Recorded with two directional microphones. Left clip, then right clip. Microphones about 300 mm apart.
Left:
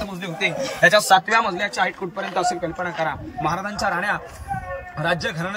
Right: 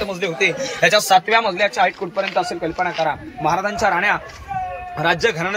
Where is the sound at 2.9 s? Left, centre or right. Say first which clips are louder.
Right 4 dB; right.